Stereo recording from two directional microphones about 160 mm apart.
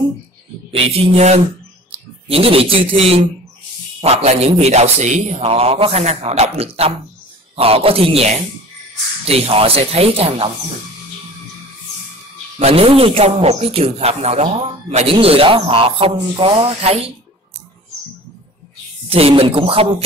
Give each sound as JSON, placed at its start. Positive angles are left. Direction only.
{"t": 0.7, "sound": "speech", "side_deg": -35}
{"t": 12.5, "sound": "speech", "side_deg": -40}
{"t": 19.0, "sound": "speech", "side_deg": -35}